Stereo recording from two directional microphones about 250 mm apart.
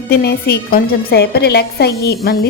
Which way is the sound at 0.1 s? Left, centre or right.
Left.